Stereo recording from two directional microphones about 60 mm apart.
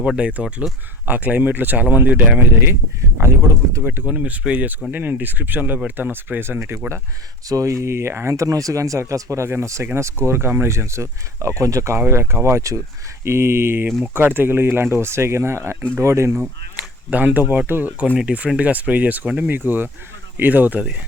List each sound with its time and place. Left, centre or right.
0.2 s speech: right
3.2 s speech: right
3.8 s speech: right
4.1 s speech: right
7.4 s speech: right
8.4 s speech: right
11.9 s speech: right
13.2 s speech: right
16.7 s a sound: right
17.7 s speech: right
18.2 s speech: centre